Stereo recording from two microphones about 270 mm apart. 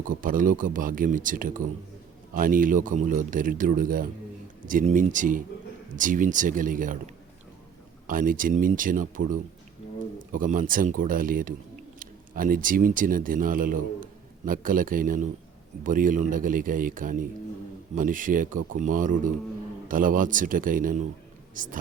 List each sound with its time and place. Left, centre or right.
0.1 s speech: right
8.0 s speech: right
10.3 s a man's voice: right